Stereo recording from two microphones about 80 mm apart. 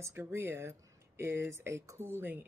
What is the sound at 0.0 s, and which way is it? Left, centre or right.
Speech, right.